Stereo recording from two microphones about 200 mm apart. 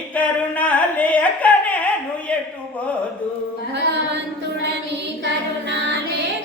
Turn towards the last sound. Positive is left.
turn(degrees=-60)  # may be behind; listen again after turning